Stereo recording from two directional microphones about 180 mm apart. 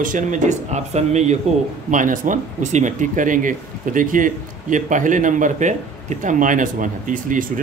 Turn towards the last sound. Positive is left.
turn(degrees=-45)  # may be behind; listen again after turning